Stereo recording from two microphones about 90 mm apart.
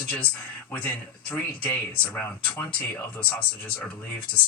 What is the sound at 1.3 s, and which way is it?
Speech, 15° left (ahead or behind).